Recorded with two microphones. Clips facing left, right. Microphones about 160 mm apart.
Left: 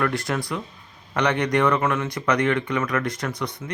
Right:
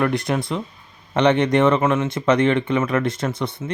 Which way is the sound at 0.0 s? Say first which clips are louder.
Right 4 dB; 20° right (ahead or behind).